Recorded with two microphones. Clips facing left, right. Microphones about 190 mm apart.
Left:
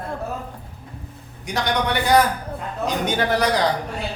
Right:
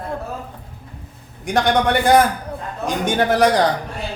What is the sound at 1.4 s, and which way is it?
Speech, 50° right (ahead or behind).